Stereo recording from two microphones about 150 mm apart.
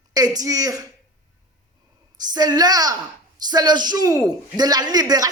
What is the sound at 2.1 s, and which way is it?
Speech, 25° right (ahead or behind).